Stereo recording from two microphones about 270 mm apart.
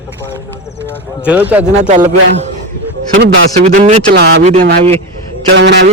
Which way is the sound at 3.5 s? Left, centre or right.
Right.